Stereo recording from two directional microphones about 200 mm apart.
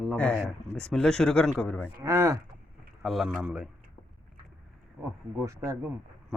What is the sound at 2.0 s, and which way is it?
Speech, 15° right (ahead or behind).